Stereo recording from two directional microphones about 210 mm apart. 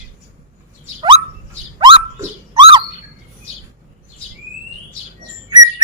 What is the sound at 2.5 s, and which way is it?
Bird, 25° right (ahead or behind).